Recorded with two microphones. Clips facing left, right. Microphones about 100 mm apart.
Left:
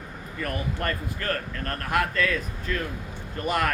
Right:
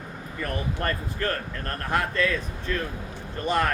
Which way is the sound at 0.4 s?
35° right (ahead or behind).